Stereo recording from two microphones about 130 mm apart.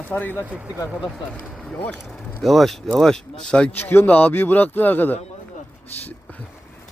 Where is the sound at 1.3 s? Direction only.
10° left (ahead or behind).